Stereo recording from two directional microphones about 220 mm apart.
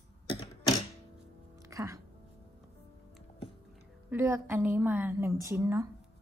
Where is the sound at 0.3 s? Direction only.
25° left (ahead or behind).